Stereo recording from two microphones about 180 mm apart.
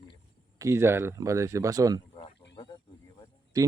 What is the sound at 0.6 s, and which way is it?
Speech, 15° right (ahead or behind).